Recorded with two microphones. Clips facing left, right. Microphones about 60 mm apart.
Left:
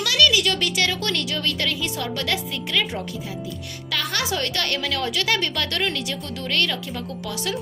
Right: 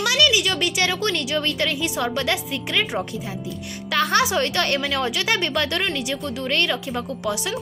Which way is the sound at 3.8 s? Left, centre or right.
Right.